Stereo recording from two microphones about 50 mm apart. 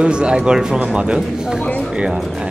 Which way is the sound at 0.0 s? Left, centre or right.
Centre.